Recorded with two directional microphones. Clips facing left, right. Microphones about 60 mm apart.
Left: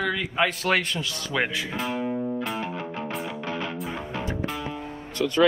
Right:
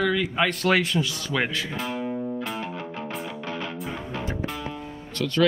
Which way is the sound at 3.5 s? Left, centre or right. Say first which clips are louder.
Left 2 dB; left.